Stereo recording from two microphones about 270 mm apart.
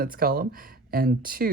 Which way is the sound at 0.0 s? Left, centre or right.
Right.